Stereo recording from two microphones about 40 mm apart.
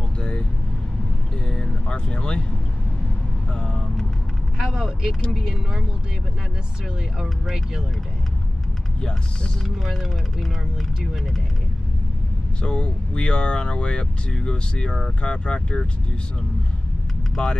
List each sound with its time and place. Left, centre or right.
0.2 s vehicle: left
1.5 s vehicle: left
3.5 s speech: centre
4.6 s speech: centre
9.8 s speech: centre
12.6 s speech: left
17.4 s speech: left